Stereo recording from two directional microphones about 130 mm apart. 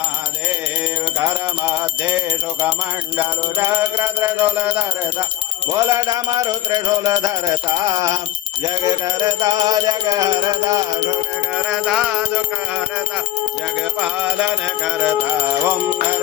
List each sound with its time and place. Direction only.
3.2 s music: 15° right (ahead or behind)
5.7 s music: 25° right (ahead or behind)
11.5 s music: 5° right (ahead or behind)
14.0 s music: 10° right (ahead or behind)